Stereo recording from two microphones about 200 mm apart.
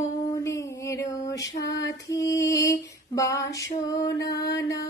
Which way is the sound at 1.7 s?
15° left (ahead or behind).